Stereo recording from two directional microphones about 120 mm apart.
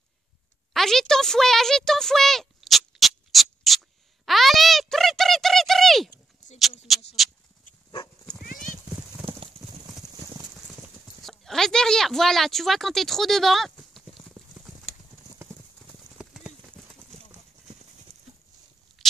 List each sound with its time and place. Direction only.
0.7 s a sound: 5° left (ahead or behind)
6.9 s speech: centre (ahead or behind)
9.8 s clip-clop: 25° right (ahead or behind)
11.1 s speech: centre (ahead or behind)
15.4 s clip-clop: 20° right (ahead or behind)
16.2 s clip-clop: centre (ahead or behind)